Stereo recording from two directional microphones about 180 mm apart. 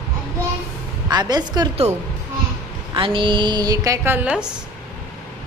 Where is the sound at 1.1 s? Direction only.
25° right (ahead or behind).